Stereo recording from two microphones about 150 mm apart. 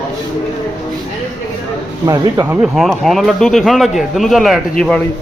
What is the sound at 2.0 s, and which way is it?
Speech, 20° right (ahead or behind).